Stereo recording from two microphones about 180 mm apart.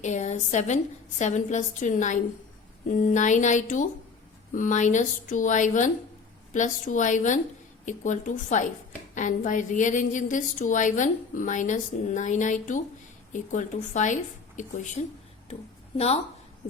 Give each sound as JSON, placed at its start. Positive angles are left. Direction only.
{"t": 0.0, "sound": "a woman's voice", "side_deg": 40}